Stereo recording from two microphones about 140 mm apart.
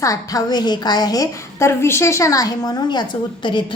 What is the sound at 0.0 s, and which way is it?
A woman's voice, 25° left (ahead or behind).